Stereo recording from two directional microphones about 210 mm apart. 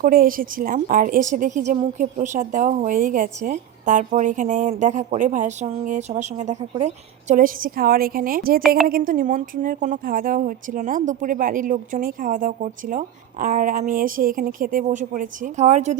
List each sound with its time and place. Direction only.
0.0 s a woman's voice: 40° right (ahead or behind)